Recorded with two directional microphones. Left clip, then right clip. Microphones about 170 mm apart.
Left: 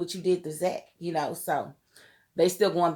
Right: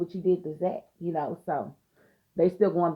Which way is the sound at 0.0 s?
25° left (ahead or behind).